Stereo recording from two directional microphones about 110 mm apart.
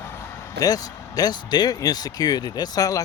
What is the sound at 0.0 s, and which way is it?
A man's voice, 20° left (ahead or behind).